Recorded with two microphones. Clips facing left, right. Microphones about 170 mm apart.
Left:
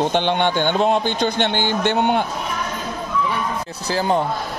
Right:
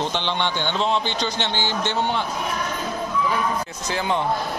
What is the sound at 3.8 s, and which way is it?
Speech, 35° left (ahead or behind).